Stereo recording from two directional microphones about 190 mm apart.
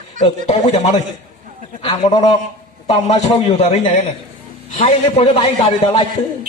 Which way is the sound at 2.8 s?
35° left (ahead or behind).